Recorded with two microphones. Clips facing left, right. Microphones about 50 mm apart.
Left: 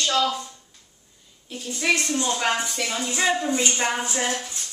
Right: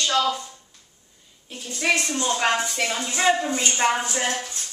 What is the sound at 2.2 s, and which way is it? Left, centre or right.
A woman's voice, centre.